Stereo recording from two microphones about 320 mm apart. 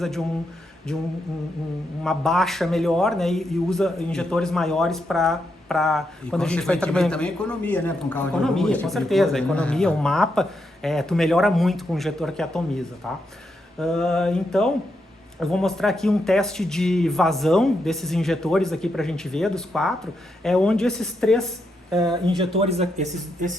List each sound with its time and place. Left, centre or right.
0.9 s a man's voice: centre
2.0 s a man's voice: centre
22.5 s speech: centre